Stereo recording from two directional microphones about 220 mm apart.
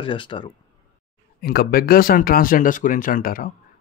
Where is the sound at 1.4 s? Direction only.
45° left (ahead or behind).